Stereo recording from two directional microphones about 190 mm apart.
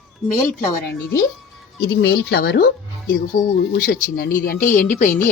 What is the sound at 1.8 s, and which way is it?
A woman's voice, 60° left (ahead or behind).